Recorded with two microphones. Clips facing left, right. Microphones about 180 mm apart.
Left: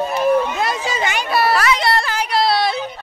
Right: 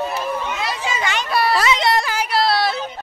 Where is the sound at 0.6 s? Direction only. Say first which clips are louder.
Left 3 dB; 50° left (ahead or behind).